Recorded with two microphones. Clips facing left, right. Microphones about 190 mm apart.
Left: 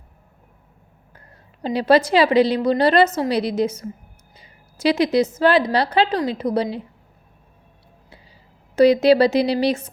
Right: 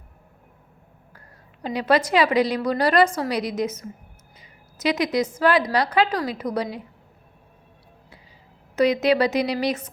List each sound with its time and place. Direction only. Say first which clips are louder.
1.6 s a woman's voice: left 5 dB; 30° left (ahead or behind)
4.4 s a sound: left 6 dB; 30° left (ahead or behind)
5.4 s a woman's voice: even; 25° left (ahead or behind)
8.7 s a woman's voice: left 6 dB; 30° left (ahead or behind)